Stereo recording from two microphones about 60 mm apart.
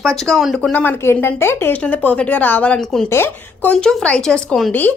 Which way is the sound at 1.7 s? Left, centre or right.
Left.